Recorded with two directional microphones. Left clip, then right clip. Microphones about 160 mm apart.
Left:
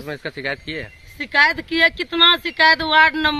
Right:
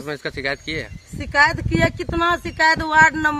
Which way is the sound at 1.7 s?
30° left (ahead or behind).